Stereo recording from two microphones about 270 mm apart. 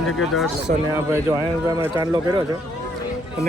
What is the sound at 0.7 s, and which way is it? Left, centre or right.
Speech, right.